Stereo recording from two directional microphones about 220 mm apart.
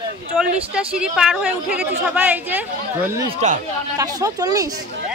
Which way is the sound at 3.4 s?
30° right (ahead or behind).